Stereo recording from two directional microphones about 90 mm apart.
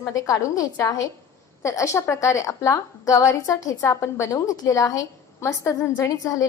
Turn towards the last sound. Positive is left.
turn(degrees=40)  # may be behind; listen again after turning